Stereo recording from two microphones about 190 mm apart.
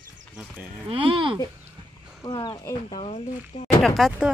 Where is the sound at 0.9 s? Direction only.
30° right (ahead or behind).